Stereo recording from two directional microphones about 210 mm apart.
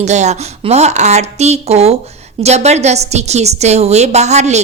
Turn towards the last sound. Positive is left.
turn(degrees=-30)  # may be behind; listen again after turning